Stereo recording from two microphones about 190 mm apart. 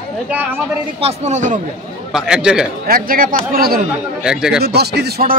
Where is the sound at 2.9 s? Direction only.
45° right (ahead or behind).